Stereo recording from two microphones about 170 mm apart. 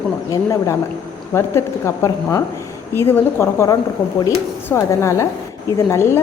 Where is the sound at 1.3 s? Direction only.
15° left (ahead or behind).